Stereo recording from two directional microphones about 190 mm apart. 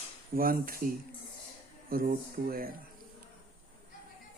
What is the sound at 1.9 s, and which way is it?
Speech, 50° right (ahead or behind).